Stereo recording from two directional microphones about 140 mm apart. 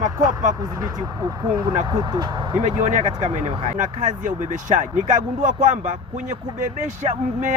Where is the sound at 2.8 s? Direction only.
60° right (ahead or behind).